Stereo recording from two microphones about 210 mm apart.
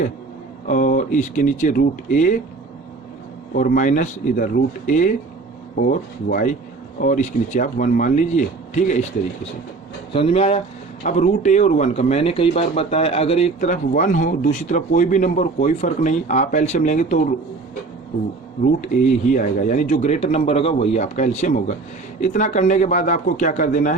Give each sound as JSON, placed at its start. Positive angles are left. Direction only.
{"t": 0.7, "sound": "a man's voice", "side_deg": 40}
{"t": 3.5, "sound": "a man's voice", "side_deg": 40}
{"t": 10.1, "sound": "a man's voice", "side_deg": 25}
{"t": 19.3, "sound": "a man's voice", "side_deg": 40}